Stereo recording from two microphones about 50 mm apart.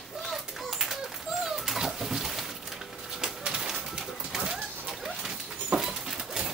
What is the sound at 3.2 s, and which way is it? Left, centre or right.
Bird, centre.